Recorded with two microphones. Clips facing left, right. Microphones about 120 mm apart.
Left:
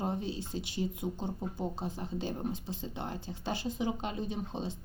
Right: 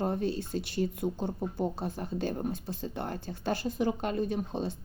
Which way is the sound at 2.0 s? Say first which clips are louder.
Right 4 dB; 55° right (ahead or behind).